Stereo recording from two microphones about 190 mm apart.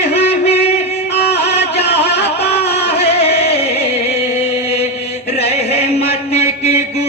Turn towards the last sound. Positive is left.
turn(degrees=35)  # may be behind; listen again after turning